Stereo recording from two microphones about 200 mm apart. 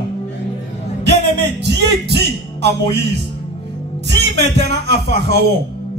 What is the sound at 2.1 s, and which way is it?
Speech, 55° right (ahead or behind).